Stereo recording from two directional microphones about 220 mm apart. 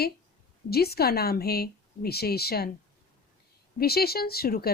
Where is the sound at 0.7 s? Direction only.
45° left (ahead or behind).